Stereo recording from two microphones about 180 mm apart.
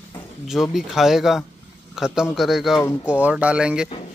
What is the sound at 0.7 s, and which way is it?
Speech, centre (ahead or behind).